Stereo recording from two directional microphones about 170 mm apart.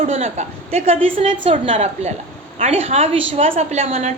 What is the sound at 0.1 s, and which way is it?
A woman's voice, 40° right (ahead or behind).